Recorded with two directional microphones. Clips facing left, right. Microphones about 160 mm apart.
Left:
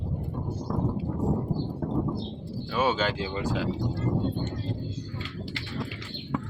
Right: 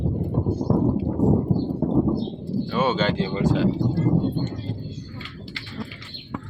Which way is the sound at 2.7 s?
10° left (ahead or behind).